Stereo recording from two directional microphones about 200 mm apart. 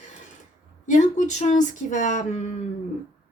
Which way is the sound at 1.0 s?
35° left (ahead or behind).